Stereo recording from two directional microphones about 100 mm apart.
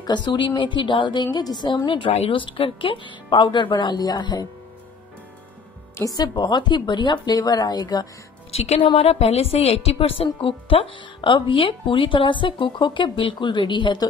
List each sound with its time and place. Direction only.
0.0 s a woman's voice: 45° left (ahead or behind)
5.9 s a woman's voice: 40° left (ahead or behind)
8.5 s a woman's voice: 90° left; by 14.0 s 50° left (ahead or behind)